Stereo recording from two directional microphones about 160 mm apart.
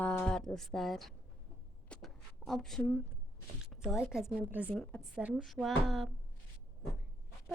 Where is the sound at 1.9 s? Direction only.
Centre (ahead or behind).